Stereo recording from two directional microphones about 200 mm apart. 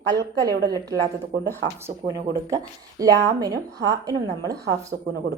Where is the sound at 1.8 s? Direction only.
15° right (ahead or behind).